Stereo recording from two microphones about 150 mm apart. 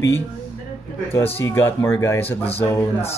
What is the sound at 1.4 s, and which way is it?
Speech, 20° left (ahead or behind).